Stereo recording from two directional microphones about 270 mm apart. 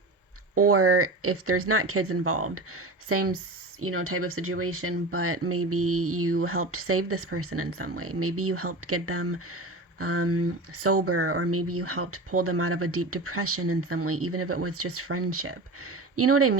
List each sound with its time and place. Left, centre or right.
0.5 s speech: right